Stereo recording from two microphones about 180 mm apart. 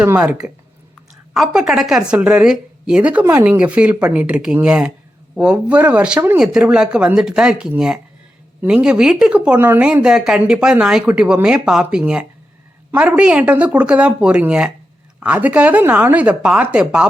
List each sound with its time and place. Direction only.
0.0 s a woman's voice: 10° right (ahead or behind)